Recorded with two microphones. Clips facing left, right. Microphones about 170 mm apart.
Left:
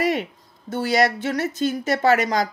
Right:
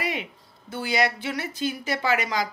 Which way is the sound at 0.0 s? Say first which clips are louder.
Left 8 dB; 45° left (ahead or behind).